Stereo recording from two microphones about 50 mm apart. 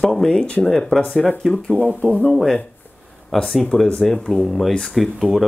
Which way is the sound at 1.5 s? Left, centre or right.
Centre.